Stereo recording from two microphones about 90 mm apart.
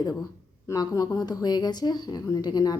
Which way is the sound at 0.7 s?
45° left (ahead or behind).